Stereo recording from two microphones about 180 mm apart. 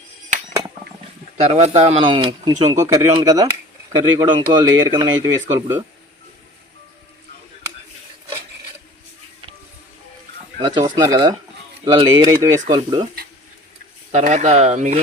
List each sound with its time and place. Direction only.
1.4 s speech: 40° right (ahead or behind); by 5.8 s 15° right (ahead or behind)
10.7 s speech: 25° right (ahead or behind)
14.1 s speech: 40° right (ahead or behind)